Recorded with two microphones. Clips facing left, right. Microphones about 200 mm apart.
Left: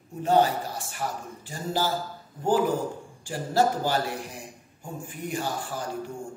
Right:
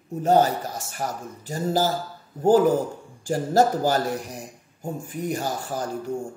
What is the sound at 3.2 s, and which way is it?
A man's voice, 45° right (ahead or behind).